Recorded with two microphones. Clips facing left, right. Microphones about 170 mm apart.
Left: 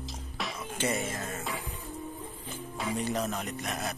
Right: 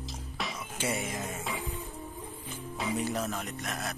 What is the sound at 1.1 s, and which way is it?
Music, 15° right (ahead or behind).